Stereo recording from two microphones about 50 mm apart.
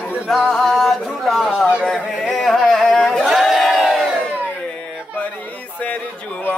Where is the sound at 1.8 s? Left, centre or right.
Centre.